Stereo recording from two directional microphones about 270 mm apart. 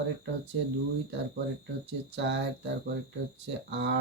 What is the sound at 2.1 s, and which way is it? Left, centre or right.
Speech, right.